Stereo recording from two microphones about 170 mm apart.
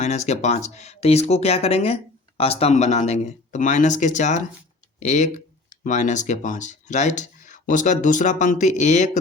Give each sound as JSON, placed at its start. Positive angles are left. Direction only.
{"t": 0.0, "sound": "speech", "side_deg": 40}